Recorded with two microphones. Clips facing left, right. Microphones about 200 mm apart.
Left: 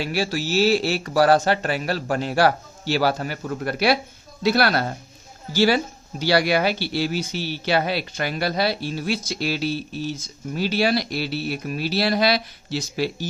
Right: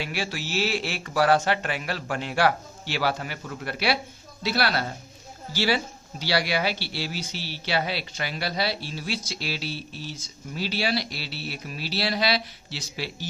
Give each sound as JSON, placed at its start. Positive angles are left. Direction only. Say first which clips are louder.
{"t": 0.0, "sound": "speech", "louder": "left 7 dB", "side_deg": 40}